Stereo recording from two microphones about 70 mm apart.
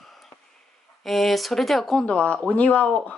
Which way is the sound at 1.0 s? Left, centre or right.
Centre.